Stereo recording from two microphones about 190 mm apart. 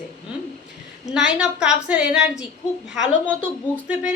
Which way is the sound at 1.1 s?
5° right (ahead or behind).